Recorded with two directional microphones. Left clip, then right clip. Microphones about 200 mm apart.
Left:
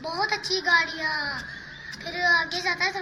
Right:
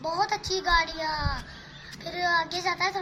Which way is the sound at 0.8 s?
Centre (ahead or behind).